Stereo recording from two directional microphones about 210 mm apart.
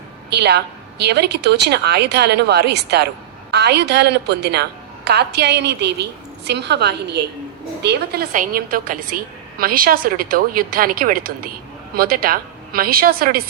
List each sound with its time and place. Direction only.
0.3 s a woman's voice: 50° right (ahead or behind)